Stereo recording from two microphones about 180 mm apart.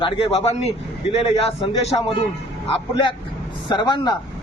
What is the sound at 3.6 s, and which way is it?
Speech, 25° left (ahead or behind).